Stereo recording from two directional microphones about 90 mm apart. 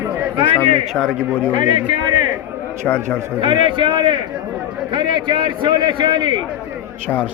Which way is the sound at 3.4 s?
70° right (ahead or behind).